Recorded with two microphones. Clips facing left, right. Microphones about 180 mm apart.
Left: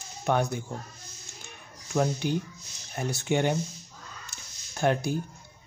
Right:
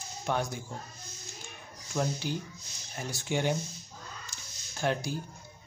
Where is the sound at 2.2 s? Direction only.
55° left (ahead or behind).